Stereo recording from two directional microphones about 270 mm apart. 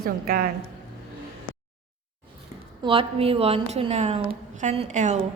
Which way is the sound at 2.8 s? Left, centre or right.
Centre.